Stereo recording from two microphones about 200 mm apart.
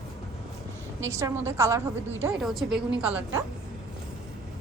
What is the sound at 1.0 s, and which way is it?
Speech, 15° right (ahead or behind).